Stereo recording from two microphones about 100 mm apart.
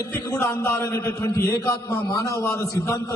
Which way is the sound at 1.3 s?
30° left (ahead or behind).